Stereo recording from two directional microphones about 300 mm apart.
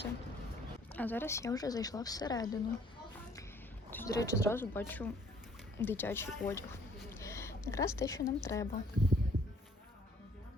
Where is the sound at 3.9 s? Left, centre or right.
Centre.